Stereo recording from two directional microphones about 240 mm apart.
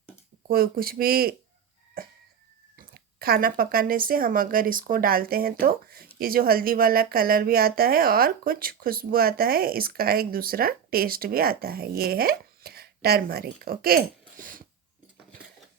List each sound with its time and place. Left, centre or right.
0.4 s speech: right
2.7 s speech: right